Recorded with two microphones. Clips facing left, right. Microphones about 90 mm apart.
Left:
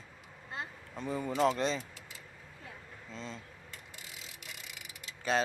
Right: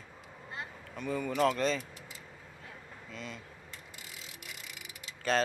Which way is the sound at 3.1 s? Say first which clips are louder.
Even; 25° left (ahead or behind).